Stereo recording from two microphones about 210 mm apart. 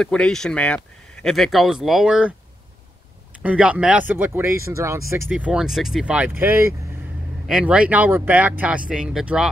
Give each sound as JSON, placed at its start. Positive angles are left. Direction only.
{"t": 0.0, "sound": "speech", "side_deg": 5}
{"t": 3.4, "sound": "speech", "side_deg": -5}